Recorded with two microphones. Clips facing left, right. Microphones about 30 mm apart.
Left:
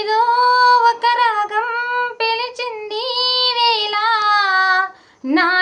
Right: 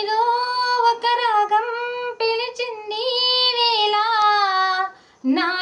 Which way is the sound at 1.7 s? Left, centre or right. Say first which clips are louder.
Left 6 dB; left.